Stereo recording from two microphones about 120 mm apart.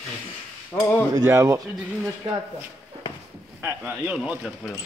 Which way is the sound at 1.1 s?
25° right (ahead or behind).